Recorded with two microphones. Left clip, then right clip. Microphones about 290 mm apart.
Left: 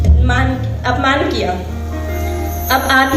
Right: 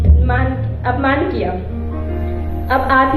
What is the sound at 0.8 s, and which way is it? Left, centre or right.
Speech, left.